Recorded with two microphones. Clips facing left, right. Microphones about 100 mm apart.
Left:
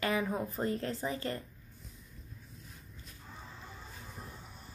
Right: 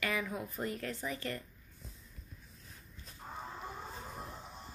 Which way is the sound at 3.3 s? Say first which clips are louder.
Right 7 dB; 50° right (ahead or behind).